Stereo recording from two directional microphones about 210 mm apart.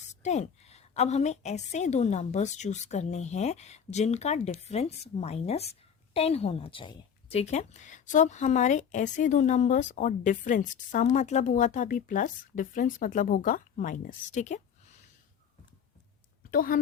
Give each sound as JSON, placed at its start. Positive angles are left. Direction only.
{"t": 0.0, "sound": "a woman's voice", "side_deg": 35}
{"t": 16.5, "sound": "a woman's voice", "side_deg": 40}